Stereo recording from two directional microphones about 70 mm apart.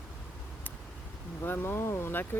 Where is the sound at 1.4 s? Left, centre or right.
Left.